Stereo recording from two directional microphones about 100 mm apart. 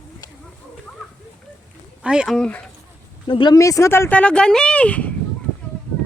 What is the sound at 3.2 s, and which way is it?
Speech, 55° left (ahead or behind).